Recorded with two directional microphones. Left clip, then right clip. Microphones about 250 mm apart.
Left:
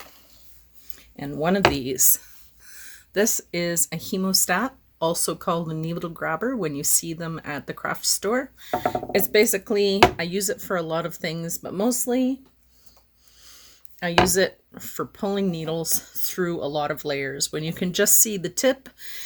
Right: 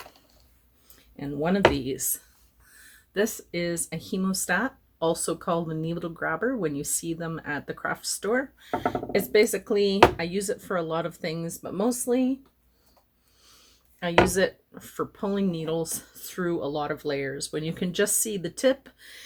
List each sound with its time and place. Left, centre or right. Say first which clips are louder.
0.9 s speech: left 2 dB; left
13.4 s a sound: left 6 dB; left
14.3 s speech: left 3 dB; left